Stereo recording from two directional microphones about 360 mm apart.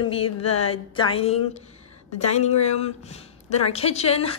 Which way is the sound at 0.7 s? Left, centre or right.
Centre.